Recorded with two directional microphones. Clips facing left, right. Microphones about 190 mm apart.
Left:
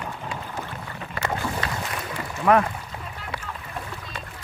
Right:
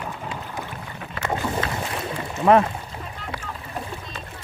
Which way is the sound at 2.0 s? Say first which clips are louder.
Right 3 dB; 25° right (ahead or behind).